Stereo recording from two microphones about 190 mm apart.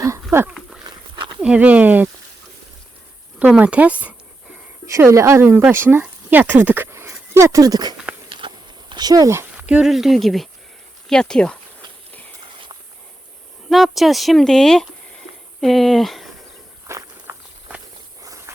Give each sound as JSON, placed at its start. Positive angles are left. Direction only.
{"t": 0.0, "sound": "a sound", "side_deg": -15}
{"t": 0.9, "sound": "dog", "side_deg": -25}
{"t": 1.4, "sound": "speech", "side_deg": -5}
{"t": 3.3, "sound": "speech", "side_deg": -5}
{"t": 8.3, "sound": "a sound", "side_deg": -25}
{"t": 11.1, "sound": "speech", "side_deg": 5}
{"t": 13.7, "sound": "speech", "side_deg": 0}
{"t": 16.8, "sound": "walk", "side_deg": -15}